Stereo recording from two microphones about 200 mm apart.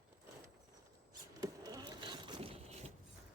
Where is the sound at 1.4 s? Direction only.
20° right (ahead or behind).